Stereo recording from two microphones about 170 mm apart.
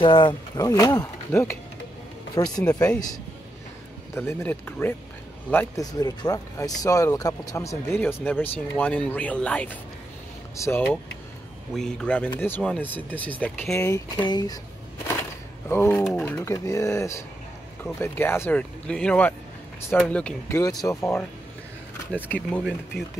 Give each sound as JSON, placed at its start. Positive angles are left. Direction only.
{"t": 0.0, "sound": "speech", "side_deg": 30}
{"t": 4.1, "sound": "speech", "side_deg": 15}
{"t": 5.9, "sound": "speech", "side_deg": 20}
{"t": 15.7, "sound": "speech", "side_deg": 15}
{"t": 20.5, "sound": "speech", "side_deg": 20}
{"t": 22.3, "sound": "speech", "side_deg": 10}